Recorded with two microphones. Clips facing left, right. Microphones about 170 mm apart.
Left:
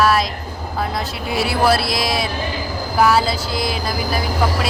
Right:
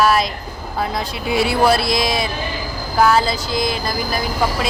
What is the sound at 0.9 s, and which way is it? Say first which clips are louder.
Speech: right 2 dB; centre (ahead or behind).